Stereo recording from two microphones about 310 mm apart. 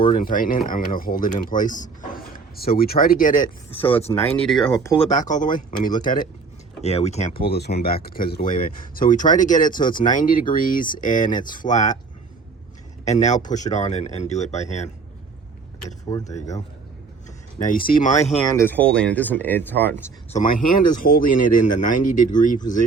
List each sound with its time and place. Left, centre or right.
0.0 s speech: left
3.8 s speech: centre
4.7 s speech: centre
6.8 s speech: left
13.1 s speech: left
16.0 s speech: centre
17.6 s speech: left
18.4 s speech: centre
20.3 s speech: left